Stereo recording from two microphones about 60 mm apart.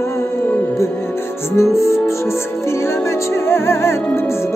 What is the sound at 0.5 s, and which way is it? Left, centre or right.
Music, left.